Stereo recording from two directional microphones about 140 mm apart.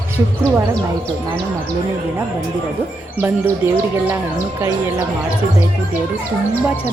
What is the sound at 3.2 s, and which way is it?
Speech, 15° right (ahead or behind).